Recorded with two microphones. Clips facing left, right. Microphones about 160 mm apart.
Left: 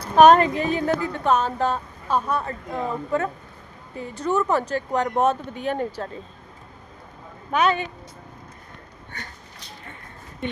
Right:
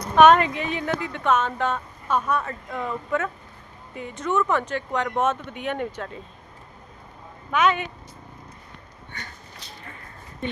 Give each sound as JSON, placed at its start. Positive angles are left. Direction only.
{"t": 0.0, "sound": "speech", "side_deg": 35}
{"t": 7.5, "sound": "speech", "side_deg": 35}